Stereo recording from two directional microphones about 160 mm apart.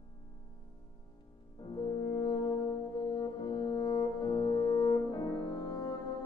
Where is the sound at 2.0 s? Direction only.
20° left (ahead or behind).